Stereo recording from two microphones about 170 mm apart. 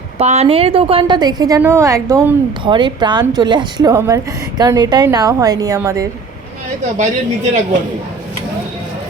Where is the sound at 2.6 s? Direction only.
30° right (ahead or behind).